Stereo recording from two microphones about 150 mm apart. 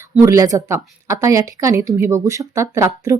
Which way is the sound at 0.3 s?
20° right (ahead or behind).